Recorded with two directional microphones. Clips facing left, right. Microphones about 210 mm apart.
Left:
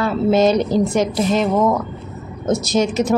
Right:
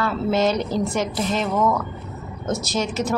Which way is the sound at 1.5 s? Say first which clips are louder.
Left 4 dB; 30° left (ahead or behind).